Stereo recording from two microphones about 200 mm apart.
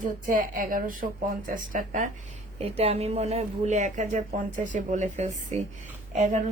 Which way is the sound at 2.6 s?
30° right (ahead or behind).